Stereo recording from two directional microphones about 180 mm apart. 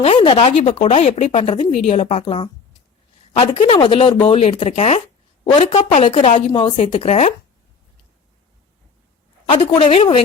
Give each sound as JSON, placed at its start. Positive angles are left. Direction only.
{"t": 0.0, "sound": "speech", "side_deg": 30}
{"t": 9.5, "sound": "speech", "side_deg": 30}